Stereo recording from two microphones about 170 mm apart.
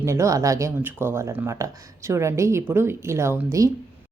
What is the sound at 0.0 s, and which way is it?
A woman's voice, 15° right (ahead or behind).